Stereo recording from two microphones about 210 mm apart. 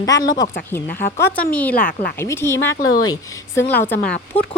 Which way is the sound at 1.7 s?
45° left (ahead or behind).